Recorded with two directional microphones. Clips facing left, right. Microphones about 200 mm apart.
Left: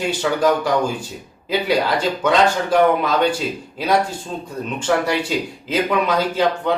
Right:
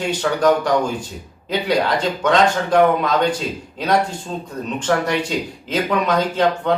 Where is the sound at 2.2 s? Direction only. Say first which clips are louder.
Right 1 dB; 5° left (ahead or behind).